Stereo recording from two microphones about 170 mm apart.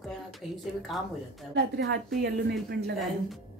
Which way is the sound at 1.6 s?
80° right.